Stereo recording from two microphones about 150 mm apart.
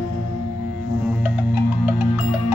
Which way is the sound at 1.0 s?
10° right (ahead or behind).